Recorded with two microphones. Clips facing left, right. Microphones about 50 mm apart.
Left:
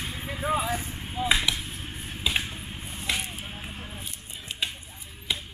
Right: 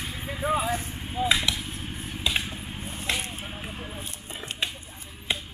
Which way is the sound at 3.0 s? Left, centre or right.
Right.